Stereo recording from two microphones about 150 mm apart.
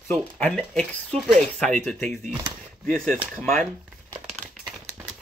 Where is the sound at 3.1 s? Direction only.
10° right (ahead or behind).